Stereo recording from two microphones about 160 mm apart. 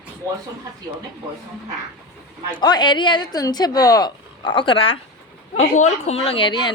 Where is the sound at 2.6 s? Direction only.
25° left (ahead or behind).